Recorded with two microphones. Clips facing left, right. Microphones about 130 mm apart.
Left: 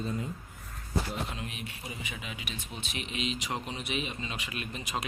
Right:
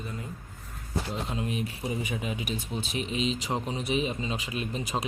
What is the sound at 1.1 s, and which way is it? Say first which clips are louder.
Speech: right 5 dB; 30° right (ahead or behind).